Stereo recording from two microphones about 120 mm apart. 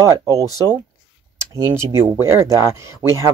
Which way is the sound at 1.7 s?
25° right (ahead or behind).